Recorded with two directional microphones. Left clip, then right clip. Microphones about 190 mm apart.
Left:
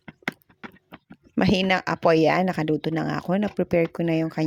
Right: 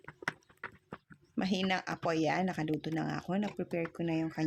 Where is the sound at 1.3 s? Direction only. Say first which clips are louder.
Left 12 dB; 50° left (ahead or behind).